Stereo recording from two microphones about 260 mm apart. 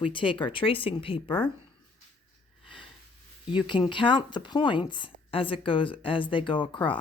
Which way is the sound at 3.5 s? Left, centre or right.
Centre.